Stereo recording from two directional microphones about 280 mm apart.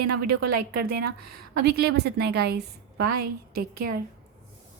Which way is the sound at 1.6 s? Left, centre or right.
Right.